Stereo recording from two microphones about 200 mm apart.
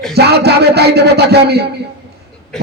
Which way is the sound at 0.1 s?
55° right (ahead or behind).